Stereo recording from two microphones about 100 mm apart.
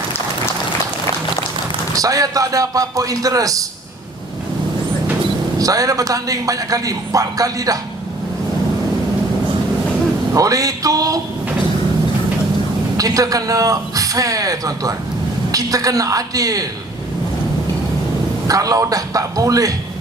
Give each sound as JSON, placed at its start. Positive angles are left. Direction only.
{"t": 2.0, "sound": "a man's voice", "side_deg": -35}
{"t": 5.5, "sound": "a man's voice", "side_deg": -35}
{"t": 10.3, "sound": "a man's voice", "side_deg": -35}
{"t": 13.0, "sound": "a man's voice", "side_deg": -35}
{"t": 18.4, "sound": "a man's voice", "side_deg": -35}